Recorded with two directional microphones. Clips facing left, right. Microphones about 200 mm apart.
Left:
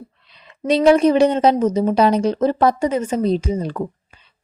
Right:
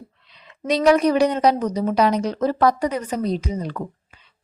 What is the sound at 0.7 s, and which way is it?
A woman's voice, 30° left (ahead or behind).